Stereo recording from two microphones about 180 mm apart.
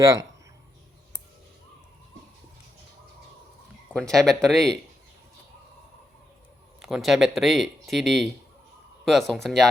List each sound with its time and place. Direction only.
0.0 s speech: 20° right (ahead or behind)
3.9 s speech: 5° left (ahead or behind)
6.8 s speech: centre (ahead or behind)